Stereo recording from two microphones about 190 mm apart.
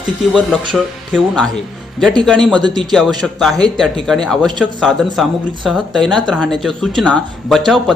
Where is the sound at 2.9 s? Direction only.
Centre (ahead or behind).